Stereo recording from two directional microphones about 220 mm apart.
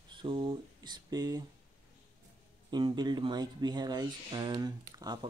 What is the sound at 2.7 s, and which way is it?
Speech, 20° right (ahead or behind).